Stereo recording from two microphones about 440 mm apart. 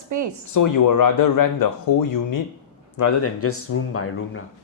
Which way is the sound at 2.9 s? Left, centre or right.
Left.